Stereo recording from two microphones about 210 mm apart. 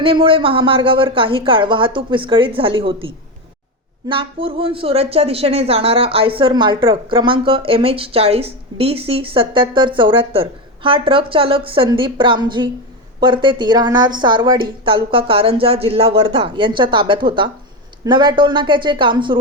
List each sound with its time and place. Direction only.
0.0 s speech: 25° right (ahead or behind)